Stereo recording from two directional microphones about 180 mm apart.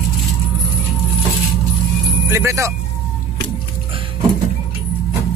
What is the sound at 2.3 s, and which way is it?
Speech, 15° right (ahead or behind).